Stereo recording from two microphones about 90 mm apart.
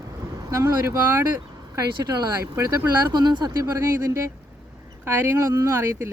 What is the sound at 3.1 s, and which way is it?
Speech, 55° right (ahead or behind).